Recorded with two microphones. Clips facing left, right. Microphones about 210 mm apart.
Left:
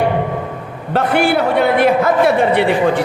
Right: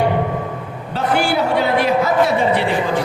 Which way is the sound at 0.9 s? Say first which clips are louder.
Left 4 dB; 60° left (ahead or behind).